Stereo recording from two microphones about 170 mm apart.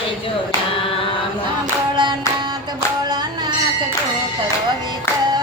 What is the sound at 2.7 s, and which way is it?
Music, 25° right (ahead or behind).